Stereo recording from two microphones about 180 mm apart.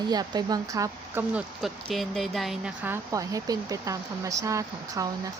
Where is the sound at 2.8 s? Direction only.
15° right (ahead or behind).